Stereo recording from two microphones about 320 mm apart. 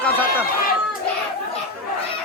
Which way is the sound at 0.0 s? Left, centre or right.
Centre.